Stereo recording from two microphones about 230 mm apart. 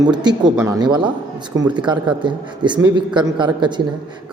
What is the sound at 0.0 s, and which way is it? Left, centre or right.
Speech, centre.